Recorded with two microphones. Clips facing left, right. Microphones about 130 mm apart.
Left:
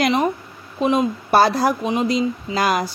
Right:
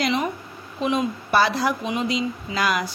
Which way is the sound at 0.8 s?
40° left (ahead or behind).